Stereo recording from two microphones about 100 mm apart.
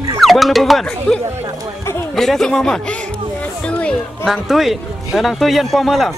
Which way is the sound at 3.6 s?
10° left (ahead or behind).